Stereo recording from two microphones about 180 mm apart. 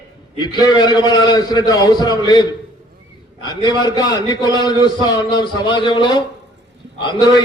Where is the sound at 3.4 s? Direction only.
25° left (ahead or behind).